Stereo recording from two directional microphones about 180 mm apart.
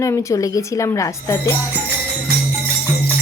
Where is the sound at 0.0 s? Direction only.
20° left (ahead or behind).